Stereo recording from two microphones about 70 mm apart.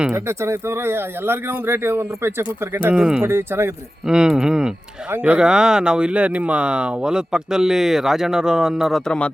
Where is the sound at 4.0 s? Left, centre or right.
Centre.